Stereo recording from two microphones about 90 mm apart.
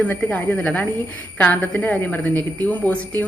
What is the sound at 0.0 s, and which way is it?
Speech, 15° left (ahead or behind).